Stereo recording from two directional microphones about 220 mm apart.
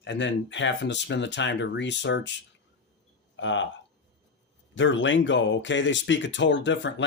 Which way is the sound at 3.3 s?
55° left (ahead or behind).